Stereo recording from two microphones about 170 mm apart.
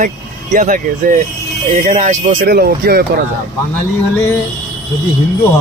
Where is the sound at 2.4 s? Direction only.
65° right (ahead or behind).